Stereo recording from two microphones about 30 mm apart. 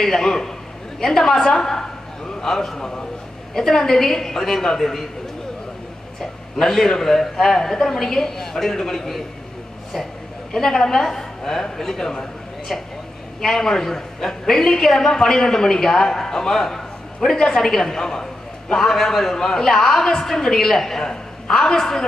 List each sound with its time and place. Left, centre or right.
0.0 s a man's voice: centre
6.5 s a woman's voice: centre
10.5 s a woman's voice: centre
13.4 s a woman's voice: centre